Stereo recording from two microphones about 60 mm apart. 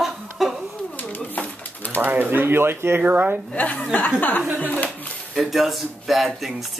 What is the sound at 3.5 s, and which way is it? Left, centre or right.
Speech, left.